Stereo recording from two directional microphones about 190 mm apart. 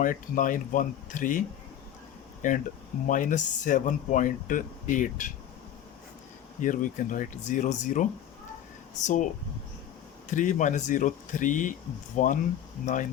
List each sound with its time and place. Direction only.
0.0 s speech: 45° left (ahead or behind)
6.6 s speech: 45° left (ahead or behind)
10.3 s speech: 40° left (ahead or behind)